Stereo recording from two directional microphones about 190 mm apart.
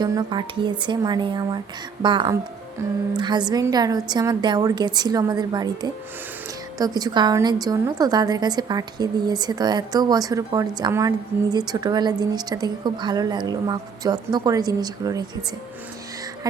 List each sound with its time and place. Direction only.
0.0 s a woman's voice: 20° right (ahead or behind)